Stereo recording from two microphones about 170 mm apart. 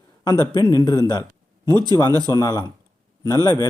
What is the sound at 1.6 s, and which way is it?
Speech, 25° right (ahead or behind).